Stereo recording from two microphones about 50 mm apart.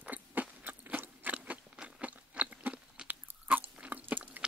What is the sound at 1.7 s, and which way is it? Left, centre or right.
Crunch, right.